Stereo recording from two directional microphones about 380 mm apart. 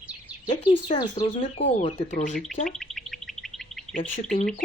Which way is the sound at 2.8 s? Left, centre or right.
Centre.